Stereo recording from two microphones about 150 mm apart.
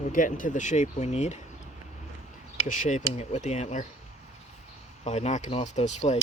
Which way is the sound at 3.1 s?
45° left (ahead or behind).